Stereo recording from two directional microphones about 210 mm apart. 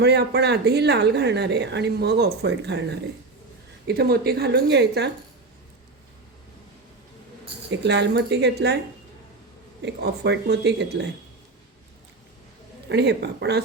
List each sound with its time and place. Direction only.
0.0 s speech: 50° right (ahead or behind)
7.7 s speech: 55° right (ahead or behind)
9.8 s speech: 50° right (ahead or behind)
12.9 s speech: 55° right (ahead or behind)